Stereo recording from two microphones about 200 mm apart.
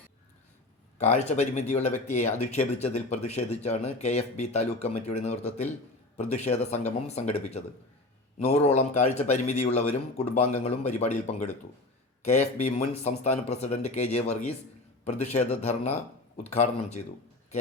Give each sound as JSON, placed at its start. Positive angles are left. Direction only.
{"t": 0.9, "sound": "speech", "side_deg": 35}